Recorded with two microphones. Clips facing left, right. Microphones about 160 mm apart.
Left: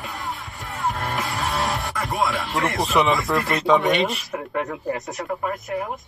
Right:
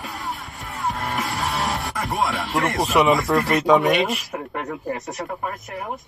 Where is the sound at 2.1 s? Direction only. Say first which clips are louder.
Even; centre (ahead or behind).